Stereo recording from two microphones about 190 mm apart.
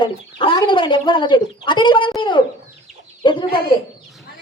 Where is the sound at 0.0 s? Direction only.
25° left (ahead or behind).